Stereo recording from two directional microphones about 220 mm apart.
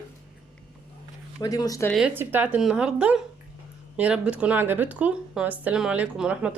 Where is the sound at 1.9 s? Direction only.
5° right (ahead or behind).